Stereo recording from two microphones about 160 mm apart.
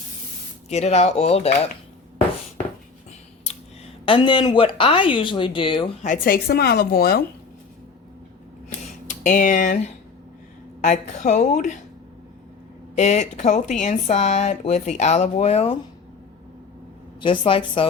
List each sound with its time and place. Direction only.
0.7 s speech: 45° left (ahead or behind)
4.0 s speech: 30° left (ahead or behind)
6.0 s speech: 60° left (ahead or behind)
9.0 s speech: 55° left (ahead or behind)
13.0 s speech: 45° left (ahead or behind)
17.2 s speech: 35° left (ahead or behind)